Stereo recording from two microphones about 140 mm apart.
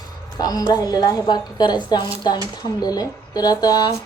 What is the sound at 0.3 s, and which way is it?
A woman's voice, 30° left (ahead or behind).